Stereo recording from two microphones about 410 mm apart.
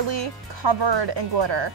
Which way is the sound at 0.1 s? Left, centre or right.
Right.